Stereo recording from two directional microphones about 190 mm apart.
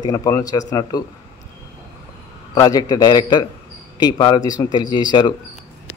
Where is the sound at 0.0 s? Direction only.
20° left (ahead or behind).